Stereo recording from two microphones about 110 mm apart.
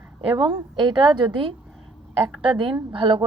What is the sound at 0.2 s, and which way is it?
Speech, 55° right (ahead or behind).